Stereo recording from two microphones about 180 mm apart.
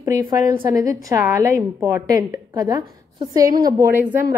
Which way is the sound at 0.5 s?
25° right (ahead or behind).